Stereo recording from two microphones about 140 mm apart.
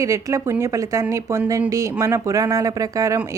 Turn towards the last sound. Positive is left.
turn(degrees=-25)  # may be behind; listen again after turning